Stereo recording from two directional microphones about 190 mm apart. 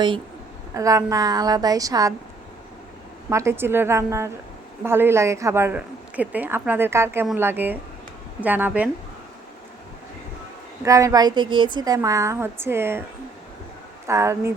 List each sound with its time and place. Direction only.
0.7 s a woman's voice: 15° right (ahead or behind)
3.2 s a woman's voice: 15° right (ahead or behind)
10.8 s a woman's voice: 15° right (ahead or behind)
14.1 s a woman's voice: 15° right (ahead or behind)